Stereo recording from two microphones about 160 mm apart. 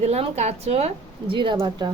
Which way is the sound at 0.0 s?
40° right (ahead or behind).